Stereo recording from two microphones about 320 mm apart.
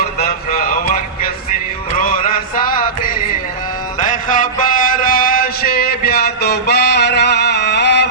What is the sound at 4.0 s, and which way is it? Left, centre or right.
Mantra, left.